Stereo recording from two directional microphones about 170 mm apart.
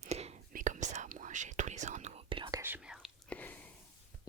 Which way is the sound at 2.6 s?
10° right (ahead or behind).